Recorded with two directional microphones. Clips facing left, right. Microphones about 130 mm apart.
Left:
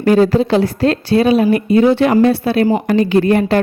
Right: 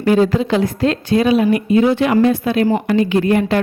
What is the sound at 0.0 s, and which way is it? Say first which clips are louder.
A woman's voice: left 3 dB; 40° left (ahead or behind).